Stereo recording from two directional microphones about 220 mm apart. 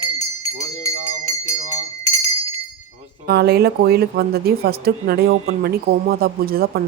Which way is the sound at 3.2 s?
45° right (ahead or behind).